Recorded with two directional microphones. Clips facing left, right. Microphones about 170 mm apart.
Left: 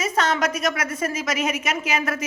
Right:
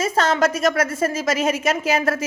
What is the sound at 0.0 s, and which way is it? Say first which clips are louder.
A woman's voice: right 4 dB; 30° right (ahead or behind).